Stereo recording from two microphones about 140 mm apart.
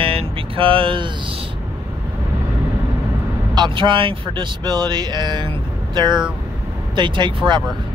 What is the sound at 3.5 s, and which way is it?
Speech, 35° right (ahead or behind).